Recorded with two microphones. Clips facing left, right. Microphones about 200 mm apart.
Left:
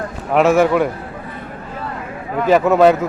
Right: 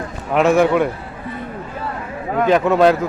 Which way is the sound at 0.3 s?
5° left (ahead or behind).